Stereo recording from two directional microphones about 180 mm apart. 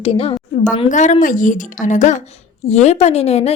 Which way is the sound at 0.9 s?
40° left (ahead or behind).